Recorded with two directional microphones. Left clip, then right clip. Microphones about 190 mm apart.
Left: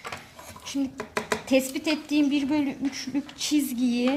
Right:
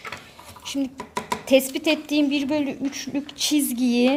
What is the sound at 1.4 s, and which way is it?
A woman's voice, 50° right (ahead or behind).